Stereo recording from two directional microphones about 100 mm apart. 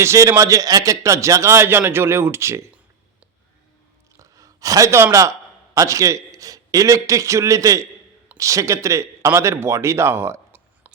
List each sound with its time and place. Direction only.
0.0 s a man's voice: 30° right (ahead or behind)
4.2 s a sound: 35° right (ahead or behind)
5.7 s a man's voice: 35° right (ahead or behind)